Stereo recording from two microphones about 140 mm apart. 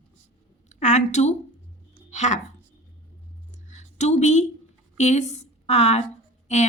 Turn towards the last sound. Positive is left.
turn(degrees=55)  # may be behind; listen again after turning